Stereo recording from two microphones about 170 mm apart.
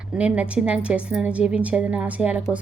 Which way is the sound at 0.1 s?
5° right (ahead or behind).